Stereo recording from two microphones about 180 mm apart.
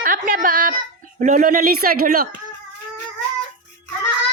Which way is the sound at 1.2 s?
45° right (ahead or behind).